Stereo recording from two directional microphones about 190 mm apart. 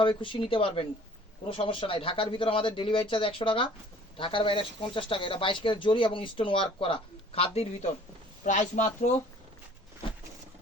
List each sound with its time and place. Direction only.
0.0 s speech: 25° left (ahead or behind)